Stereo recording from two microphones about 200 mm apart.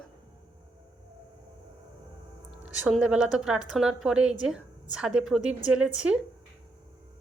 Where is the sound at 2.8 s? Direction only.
5° right (ahead or behind).